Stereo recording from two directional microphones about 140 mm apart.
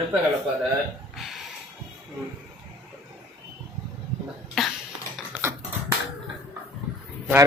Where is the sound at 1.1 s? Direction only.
Centre (ahead or behind).